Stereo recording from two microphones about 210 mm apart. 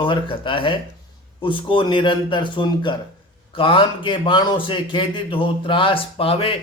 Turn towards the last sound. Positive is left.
turn(degrees=25)  # may be behind; listen again after turning